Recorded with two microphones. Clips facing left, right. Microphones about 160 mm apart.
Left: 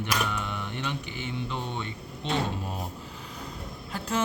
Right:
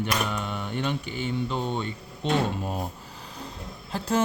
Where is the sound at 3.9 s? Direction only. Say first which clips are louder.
Right 4 dB; 30° right (ahead or behind).